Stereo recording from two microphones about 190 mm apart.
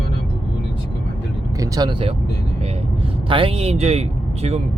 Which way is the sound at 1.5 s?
20° right (ahead or behind).